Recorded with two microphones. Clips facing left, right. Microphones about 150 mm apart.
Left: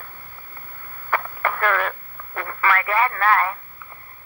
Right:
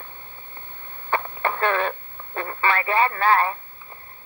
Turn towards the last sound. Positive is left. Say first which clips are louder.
# even
turn(degrees=-25)  # may be behind; listen again after turning